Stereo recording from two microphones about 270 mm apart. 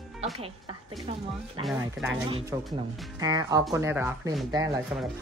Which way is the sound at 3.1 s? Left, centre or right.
Centre.